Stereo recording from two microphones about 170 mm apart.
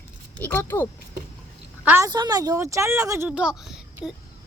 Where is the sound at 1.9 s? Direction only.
15° right (ahead or behind).